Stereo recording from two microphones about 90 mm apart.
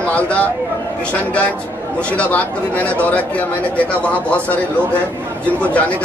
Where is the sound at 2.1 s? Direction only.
15° left (ahead or behind).